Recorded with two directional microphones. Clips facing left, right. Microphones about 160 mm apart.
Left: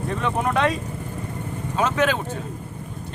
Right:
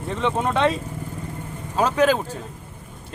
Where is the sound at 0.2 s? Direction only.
25° right (ahead or behind).